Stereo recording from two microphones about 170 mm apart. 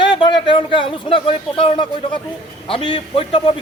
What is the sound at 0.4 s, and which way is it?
A man's voice, 30° left (ahead or behind).